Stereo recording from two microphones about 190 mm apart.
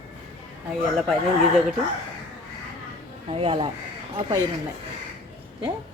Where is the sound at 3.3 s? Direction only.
30° right (ahead or behind).